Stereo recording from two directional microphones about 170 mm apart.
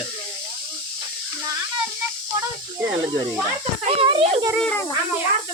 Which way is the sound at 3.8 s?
35° right (ahead or behind).